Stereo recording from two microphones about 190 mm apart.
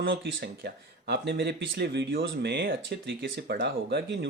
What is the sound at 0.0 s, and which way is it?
Speech, 75° right (ahead or behind).